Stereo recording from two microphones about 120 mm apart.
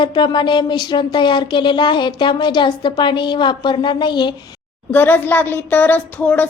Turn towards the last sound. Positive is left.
turn(degrees=15)  # may be behind; listen again after turning